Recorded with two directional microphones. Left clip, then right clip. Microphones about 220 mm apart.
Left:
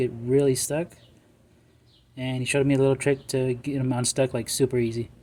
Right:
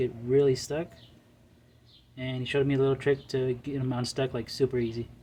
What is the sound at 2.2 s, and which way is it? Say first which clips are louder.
Speech: left 4 dB; 35° left (ahead or behind).